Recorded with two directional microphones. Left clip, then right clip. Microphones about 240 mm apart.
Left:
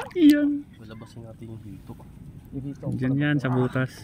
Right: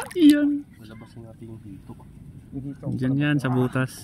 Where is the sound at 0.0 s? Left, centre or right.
Centre.